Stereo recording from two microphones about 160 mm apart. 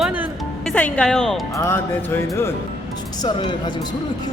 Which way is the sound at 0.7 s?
10° left (ahead or behind).